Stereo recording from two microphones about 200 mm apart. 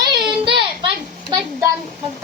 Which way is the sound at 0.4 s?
25° right (ahead or behind).